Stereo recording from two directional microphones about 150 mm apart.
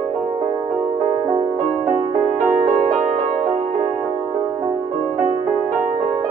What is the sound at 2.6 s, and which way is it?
Music, 50° right (ahead or behind).